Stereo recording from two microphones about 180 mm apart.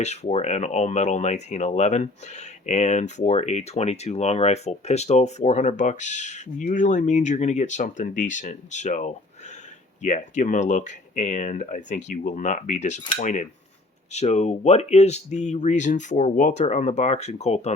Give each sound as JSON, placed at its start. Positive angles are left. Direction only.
{"t": 0.0, "sound": "speech", "side_deg": 40}